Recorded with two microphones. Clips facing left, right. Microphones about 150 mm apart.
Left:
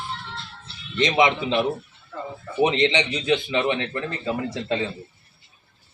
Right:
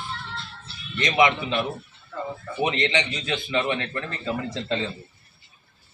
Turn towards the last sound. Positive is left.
turn(degrees=10)  # may be behind; listen again after turning